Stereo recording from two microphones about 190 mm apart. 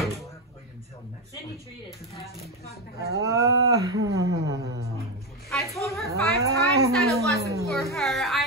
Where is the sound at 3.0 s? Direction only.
15° right (ahead or behind).